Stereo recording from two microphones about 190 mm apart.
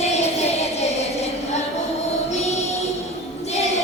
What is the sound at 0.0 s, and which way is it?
Child singing, 35° left (ahead or behind).